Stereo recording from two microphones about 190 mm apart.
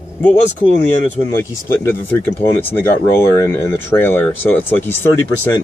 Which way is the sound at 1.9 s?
10° left (ahead or behind).